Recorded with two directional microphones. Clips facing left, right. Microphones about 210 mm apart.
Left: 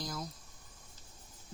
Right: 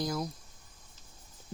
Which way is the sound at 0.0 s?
60° right (ahead or behind).